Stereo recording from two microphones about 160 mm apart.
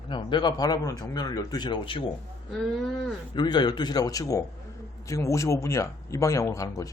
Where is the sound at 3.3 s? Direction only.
30° left (ahead or behind).